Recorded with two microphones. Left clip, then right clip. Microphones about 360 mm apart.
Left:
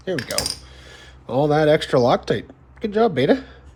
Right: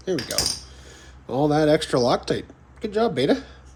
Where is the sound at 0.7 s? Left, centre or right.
Left.